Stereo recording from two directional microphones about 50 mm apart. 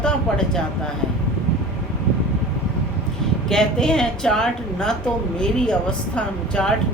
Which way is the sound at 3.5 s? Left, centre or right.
Centre.